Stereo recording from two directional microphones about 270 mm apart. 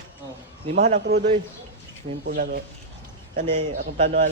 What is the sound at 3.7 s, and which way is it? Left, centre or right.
Speech, right.